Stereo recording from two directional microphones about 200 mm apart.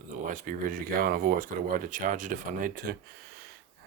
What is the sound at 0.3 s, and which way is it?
Speech, 40° right (ahead or behind).